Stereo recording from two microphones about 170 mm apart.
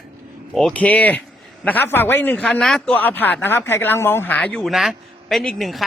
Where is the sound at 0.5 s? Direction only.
5° left (ahead or behind).